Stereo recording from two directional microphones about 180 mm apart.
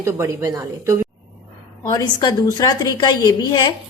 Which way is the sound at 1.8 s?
20° left (ahead or behind).